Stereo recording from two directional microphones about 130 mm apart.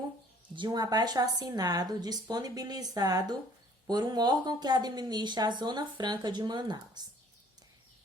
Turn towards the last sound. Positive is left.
turn(degrees=-35)  # may be behind; listen again after turning